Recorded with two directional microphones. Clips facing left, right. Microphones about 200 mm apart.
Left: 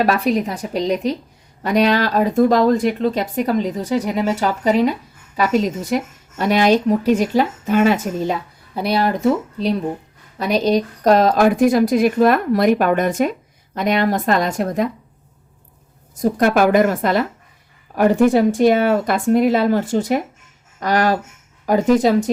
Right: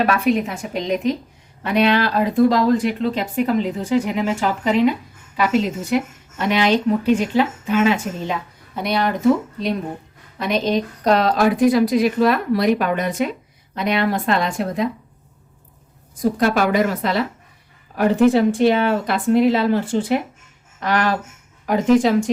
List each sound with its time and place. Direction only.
0.0 s a woman's voice: 35° left (ahead or behind)
10.3 s a woman's voice: 40° left (ahead or behind)
16.4 s a woman's voice: 50° left (ahead or behind)